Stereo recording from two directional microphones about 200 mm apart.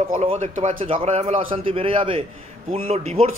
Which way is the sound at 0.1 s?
35° right (ahead or behind).